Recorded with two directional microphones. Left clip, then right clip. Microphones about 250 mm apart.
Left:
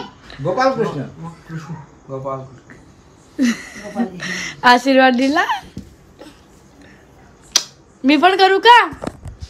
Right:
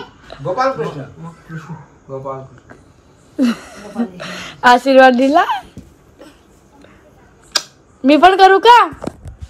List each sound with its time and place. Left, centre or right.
0.4 s speech: left
2.0 s speech: centre
7.5 s speech: centre